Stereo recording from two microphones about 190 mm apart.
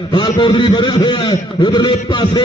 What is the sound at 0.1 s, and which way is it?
A man's voice, 25° left (ahead or behind).